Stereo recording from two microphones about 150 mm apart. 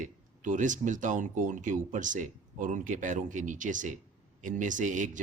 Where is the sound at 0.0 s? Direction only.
60° right (ahead or behind).